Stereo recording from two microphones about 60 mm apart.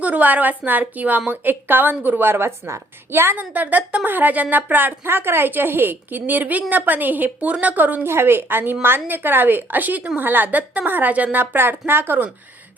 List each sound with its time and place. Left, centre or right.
0.0 s a woman's voice: right
8.0 s a woman's voice: right